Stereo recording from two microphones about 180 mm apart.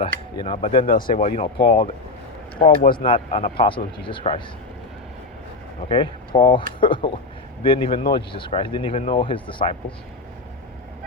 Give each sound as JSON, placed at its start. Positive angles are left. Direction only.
{"t": 0.0, "sound": "speech", "side_deg": 30}
{"t": 0.9, "sound": "speech", "side_deg": 50}
{"t": 1.2, "sound": "speech", "side_deg": 35}
{"t": 2.6, "sound": "speech", "side_deg": 55}
{"t": 3.0, "sound": "speech", "side_deg": 30}
{"t": 5.9, "sound": "speech", "side_deg": 25}